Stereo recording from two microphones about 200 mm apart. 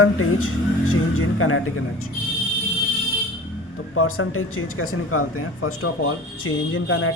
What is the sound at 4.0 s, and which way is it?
Speech, 90° left.